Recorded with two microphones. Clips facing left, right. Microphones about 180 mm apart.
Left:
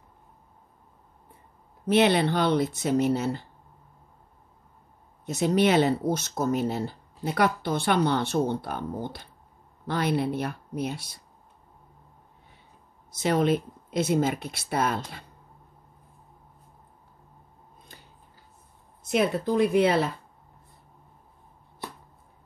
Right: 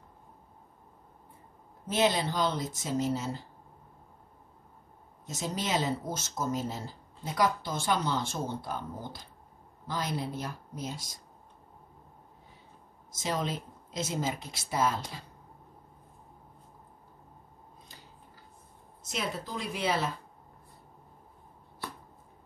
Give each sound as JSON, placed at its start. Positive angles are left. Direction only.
{"t": 1.9, "sound": "speech", "side_deg": 65}
{"t": 5.2, "sound": "speech", "side_deg": 65}
{"t": 13.1, "sound": "speech", "side_deg": 65}
{"t": 19.0, "sound": "speech", "side_deg": 60}